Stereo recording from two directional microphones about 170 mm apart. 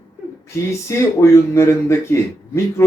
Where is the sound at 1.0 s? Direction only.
15° left (ahead or behind).